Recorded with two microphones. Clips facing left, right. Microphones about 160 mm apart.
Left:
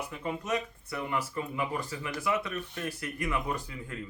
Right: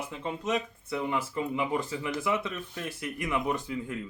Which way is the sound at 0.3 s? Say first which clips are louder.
Right 2 dB; 20° right (ahead or behind).